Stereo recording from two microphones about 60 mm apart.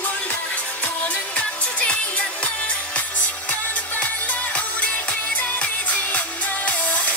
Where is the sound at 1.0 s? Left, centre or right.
Left.